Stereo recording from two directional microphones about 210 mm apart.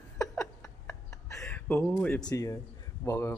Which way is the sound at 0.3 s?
5° left (ahead or behind).